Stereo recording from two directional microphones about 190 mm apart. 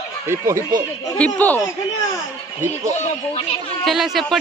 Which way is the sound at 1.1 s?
5° left (ahead or behind).